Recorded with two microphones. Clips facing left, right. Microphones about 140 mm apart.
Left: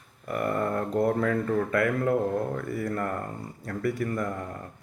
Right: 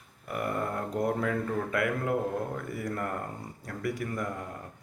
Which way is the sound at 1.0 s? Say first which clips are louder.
Left 4 dB; 10° right (ahead or behind).